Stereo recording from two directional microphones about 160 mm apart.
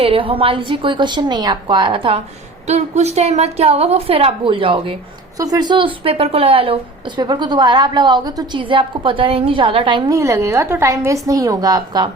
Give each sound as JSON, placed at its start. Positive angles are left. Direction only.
{"t": 0.0, "sound": "a woman's voice", "side_deg": -35}
{"t": 2.6, "sound": "a woman's voice", "side_deg": -45}